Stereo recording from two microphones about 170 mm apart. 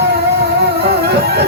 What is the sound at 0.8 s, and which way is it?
Music, 65° right (ahead or behind).